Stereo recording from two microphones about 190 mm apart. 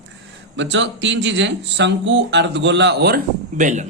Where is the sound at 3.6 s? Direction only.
40° right (ahead or behind).